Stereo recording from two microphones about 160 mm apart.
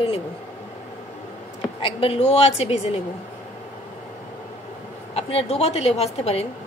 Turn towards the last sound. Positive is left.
turn(degrees=40)  # may be behind; listen again after turning